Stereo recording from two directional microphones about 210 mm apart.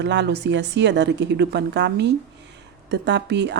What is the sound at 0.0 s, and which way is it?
A woman's voice, 55° right (ahead or behind).